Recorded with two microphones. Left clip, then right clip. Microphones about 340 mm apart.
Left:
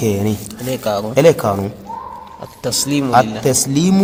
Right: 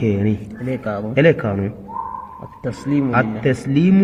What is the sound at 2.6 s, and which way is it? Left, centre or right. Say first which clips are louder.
Speech: left 3 dB; left.